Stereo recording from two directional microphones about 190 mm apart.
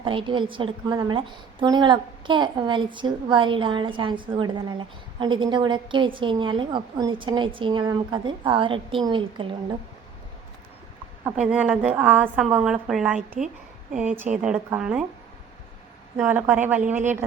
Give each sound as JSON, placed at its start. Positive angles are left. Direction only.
{"t": 0.0, "sound": "a woman's voice", "side_deg": -25}
{"t": 11.2, "sound": "a woman's voice", "side_deg": -10}
{"t": 13.4, "sound": "a woman's voice", "side_deg": -35}
{"t": 13.9, "sound": "a woman's voice", "side_deg": -10}
{"t": 16.1, "sound": "a woman's voice", "side_deg": -10}